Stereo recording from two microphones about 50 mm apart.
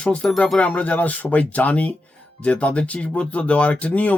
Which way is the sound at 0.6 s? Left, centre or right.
Left.